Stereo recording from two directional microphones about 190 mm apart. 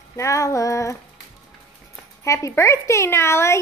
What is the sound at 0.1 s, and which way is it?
Speech, 15° left (ahead or behind).